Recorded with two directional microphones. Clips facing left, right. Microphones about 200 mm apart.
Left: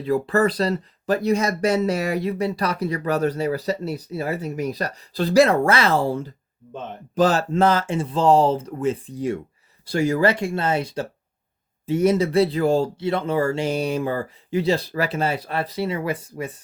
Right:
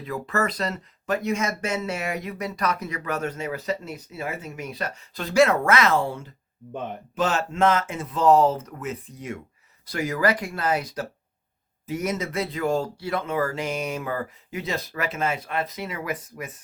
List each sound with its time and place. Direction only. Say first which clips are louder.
0.0 s speech: left 7 dB; 30° left (ahead or behind)